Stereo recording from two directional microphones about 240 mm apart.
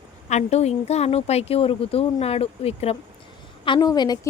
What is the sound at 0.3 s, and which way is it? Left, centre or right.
A woman's voice, left.